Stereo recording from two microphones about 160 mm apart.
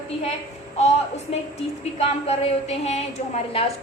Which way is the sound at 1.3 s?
40° left (ahead or behind).